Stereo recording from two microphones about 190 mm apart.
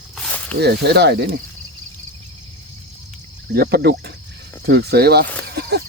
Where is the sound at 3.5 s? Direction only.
55° right (ahead or behind).